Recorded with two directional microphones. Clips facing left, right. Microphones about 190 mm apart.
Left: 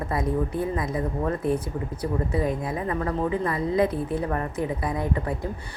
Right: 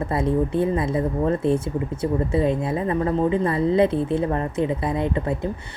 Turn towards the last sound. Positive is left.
turn(degrees=-25)  # may be behind; listen again after turning